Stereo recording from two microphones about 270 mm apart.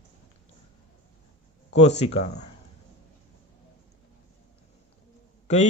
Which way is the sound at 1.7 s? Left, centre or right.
Left.